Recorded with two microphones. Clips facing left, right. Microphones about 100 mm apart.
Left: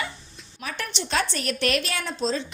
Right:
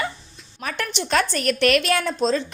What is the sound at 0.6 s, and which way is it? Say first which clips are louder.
A woman's voice: right 5 dB; 60° right (ahead or behind).